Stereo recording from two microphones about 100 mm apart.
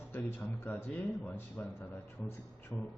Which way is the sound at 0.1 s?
15° left (ahead or behind).